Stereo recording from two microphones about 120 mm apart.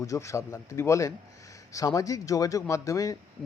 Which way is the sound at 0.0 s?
25° left (ahead or behind).